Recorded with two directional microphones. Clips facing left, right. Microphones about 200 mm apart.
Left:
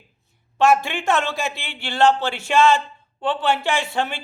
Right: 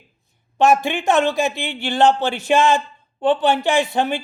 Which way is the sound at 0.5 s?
20° right (ahead or behind).